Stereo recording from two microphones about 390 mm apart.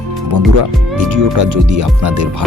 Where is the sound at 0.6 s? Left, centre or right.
Right.